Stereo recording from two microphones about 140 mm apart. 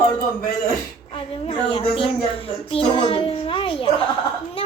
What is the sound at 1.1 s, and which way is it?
Speech, 40° left (ahead or behind).